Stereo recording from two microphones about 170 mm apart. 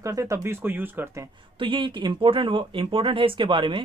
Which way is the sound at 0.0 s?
20° right (ahead or behind).